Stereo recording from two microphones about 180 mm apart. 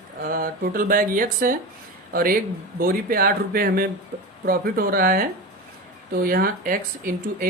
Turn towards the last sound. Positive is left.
turn(degrees=-50)  # may be behind; listen again after turning